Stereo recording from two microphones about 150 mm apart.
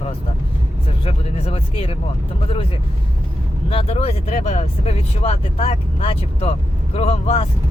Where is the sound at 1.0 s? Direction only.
40° left (ahead or behind).